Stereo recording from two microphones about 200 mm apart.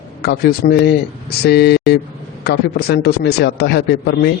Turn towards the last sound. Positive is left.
turn(degrees=55)  # may be behind; listen again after turning